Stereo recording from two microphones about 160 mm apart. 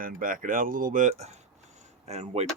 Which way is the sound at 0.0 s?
60° right (ahead or behind).